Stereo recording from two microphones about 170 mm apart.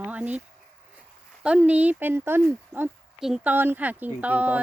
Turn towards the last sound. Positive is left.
turn(degrees=-10)  # may be behind; listen again after turning